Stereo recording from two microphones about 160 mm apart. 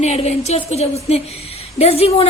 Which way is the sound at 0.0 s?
40° left (ahead or behind).